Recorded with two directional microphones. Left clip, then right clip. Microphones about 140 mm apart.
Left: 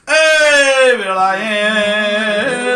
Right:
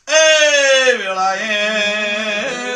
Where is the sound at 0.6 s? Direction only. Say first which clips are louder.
Left 2 dB; 10° right (ahead or behind).